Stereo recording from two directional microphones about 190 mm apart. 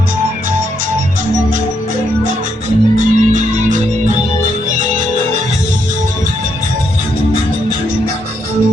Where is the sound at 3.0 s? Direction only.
40° right (ahead or behind).